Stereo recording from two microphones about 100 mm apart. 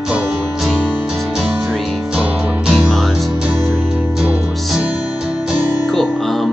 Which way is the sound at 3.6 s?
20° right (ahead or behind).